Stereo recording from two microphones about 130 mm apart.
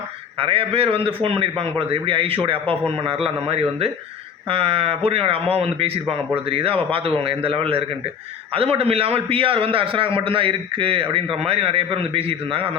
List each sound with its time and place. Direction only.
0.3 s a man's voice: 45° right (ahead or behind)